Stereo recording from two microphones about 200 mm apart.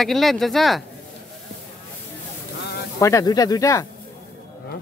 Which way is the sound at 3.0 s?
15° left (ahead or behind).